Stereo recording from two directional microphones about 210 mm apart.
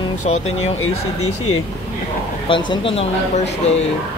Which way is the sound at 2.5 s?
25° left (ahead or behind).